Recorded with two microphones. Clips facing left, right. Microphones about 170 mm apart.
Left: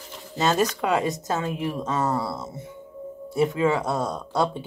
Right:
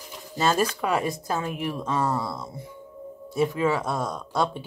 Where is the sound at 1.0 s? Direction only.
20° left (ahead or behind).